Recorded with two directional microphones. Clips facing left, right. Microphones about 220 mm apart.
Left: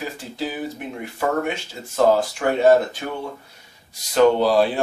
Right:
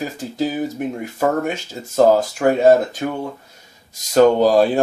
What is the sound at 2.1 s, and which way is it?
Speech, 40° right (ahead or behind).